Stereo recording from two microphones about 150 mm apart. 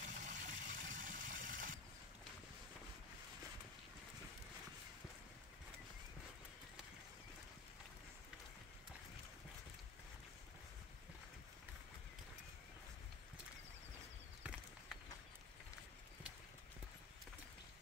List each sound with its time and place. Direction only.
0.0 s vehicle: 55° right (ahead or behind)